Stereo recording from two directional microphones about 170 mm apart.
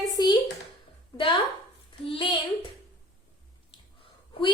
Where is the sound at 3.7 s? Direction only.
30° left (ahead or behind).